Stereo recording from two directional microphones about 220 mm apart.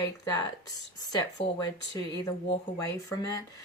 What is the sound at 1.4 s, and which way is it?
Speech, 20° left (ahead or behind).